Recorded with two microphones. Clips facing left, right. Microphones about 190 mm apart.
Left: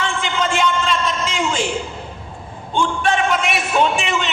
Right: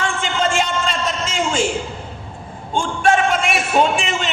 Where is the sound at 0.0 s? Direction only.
45° right (ahead or behind).